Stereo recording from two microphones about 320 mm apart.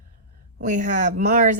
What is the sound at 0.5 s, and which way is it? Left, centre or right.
Speech, right.